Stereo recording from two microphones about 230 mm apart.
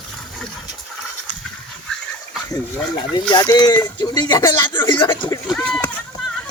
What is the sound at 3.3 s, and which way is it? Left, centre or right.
Speech, centre.